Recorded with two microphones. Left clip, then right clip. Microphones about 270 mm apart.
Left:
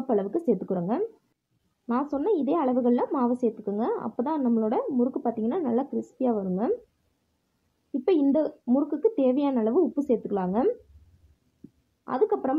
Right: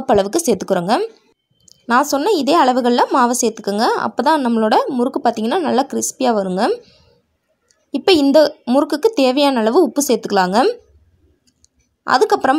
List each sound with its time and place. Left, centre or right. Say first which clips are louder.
0.0 s a woman's voice: right 11 dB; right
7.9 s a woman's voice: right 11 dB; right
12.0 s a woman's voice: right 12 dB; right